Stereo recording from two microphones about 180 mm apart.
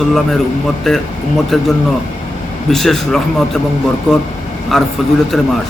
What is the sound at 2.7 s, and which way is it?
Speech, centre (ahead or behind).